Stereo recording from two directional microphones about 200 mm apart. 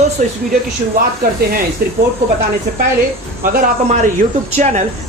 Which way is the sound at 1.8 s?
45° right (ahead or behind).